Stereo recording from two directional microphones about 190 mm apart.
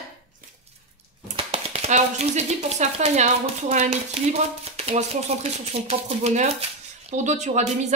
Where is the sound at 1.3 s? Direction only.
30° right (ahead or behind).